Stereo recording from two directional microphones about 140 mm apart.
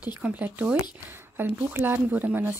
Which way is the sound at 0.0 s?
10° right (ahead or behind).